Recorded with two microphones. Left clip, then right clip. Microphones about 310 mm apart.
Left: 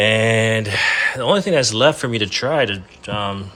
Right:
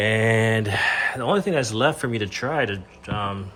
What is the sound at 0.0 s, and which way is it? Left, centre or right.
Speech, centre.